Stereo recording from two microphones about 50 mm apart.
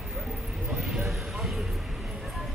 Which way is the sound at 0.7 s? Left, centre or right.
Centre.